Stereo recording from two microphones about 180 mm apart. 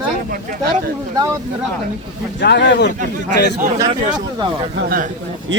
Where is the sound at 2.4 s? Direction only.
75° left (ahead or behind).